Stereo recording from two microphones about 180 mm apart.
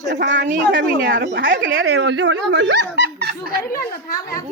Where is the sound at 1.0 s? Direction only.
55° right (ahead or behind).